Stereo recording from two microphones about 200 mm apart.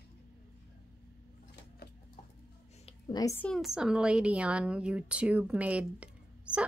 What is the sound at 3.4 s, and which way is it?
A woman's voice, centre (ahead or behind).